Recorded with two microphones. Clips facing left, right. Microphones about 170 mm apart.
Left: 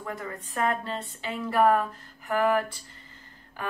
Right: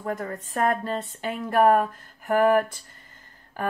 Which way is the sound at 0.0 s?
45° right (ahead or behind).